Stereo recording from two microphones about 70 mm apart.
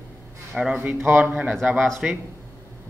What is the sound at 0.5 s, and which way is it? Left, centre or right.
Speech, centre.